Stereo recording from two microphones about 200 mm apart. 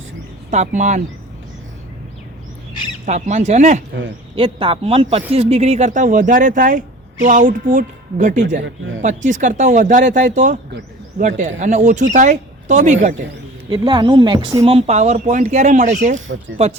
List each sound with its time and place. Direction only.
0.5 s speech: 35° right (ahead or behind)
3.1 s speech: 35° right (ahead or behind)
13.7 s speech: 20° right (ahead or behind)
14.6 s speech: 30° right (ahead or behind)
16.1 s speech: 75° right (ahead or behind)
16.6 s speech: 30° right (ahead or behind)